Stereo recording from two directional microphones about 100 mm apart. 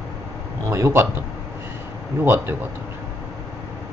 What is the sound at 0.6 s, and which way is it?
Speech, 30° right (ahead or behind).